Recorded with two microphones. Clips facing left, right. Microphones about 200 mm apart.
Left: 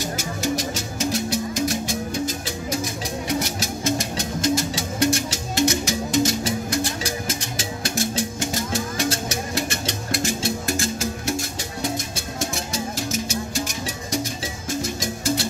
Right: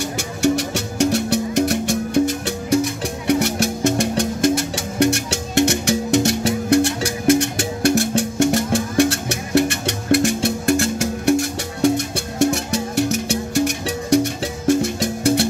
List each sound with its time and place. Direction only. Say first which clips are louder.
0.4 s music: right 8 dB; 70° right (ahead or behind)
12.4 s music: right 10 dB; 65° right (ahead or behind)